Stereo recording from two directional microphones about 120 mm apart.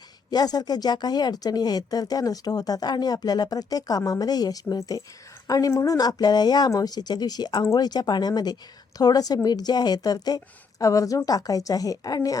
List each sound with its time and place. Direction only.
0.3 s speech: 35° left (ahead or behind)